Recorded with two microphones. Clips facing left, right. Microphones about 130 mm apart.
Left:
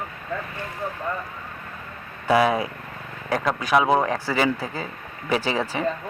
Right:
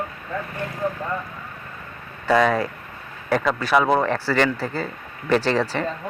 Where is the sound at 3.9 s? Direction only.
15° left (ahead or behind).